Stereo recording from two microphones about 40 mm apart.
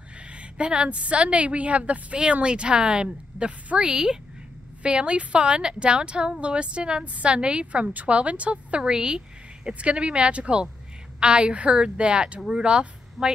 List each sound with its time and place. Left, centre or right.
0.3 s a woman's voice: right
7.8 s a woman's voice: right
8.8 s speech: centre
9.7 s a woman's voice: right